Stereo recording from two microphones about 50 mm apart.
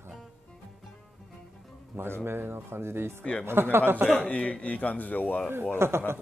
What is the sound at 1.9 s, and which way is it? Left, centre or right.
Speech, right.